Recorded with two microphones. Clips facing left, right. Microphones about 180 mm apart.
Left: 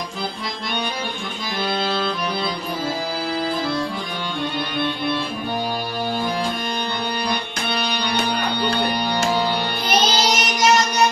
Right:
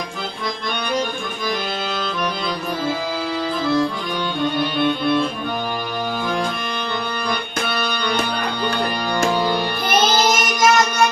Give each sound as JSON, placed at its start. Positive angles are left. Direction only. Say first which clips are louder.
{"t": 9.8, "sound": "music", "louder": "right 2 dB", "side_deg": -50}